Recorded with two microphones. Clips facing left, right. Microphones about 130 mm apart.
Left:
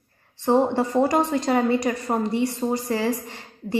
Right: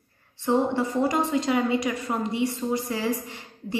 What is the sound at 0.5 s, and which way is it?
A woman's voice, 40° left (ahead or behind).